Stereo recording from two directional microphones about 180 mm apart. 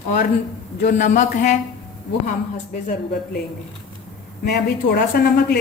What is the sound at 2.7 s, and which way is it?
Speech, 45° left (ahead or behind).